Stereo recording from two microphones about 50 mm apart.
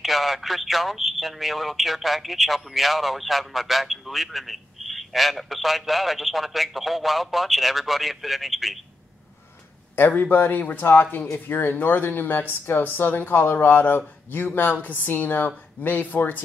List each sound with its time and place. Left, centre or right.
0.0 s speech: centre
9.9 s speech: left